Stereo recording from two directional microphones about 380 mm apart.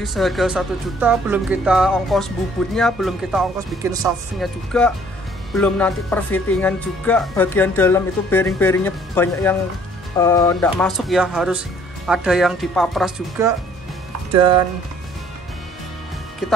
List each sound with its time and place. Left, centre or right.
0.0 s speech: centre
16.4 s speech: centre